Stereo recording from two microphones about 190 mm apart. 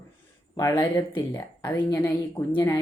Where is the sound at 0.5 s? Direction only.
15° left (ahead or behind).